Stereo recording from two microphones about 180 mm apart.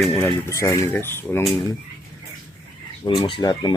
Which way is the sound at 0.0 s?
10° left (ahead or behind).